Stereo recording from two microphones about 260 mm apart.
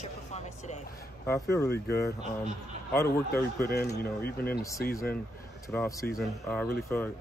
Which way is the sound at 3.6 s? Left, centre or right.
Left.